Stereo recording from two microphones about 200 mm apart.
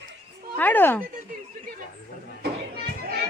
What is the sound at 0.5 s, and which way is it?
Speech, 10° left (ahead or behind).